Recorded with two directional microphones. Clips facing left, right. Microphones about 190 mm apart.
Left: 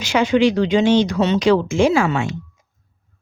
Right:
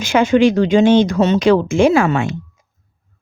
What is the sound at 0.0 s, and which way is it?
Speech, 50° right (ahead or behind).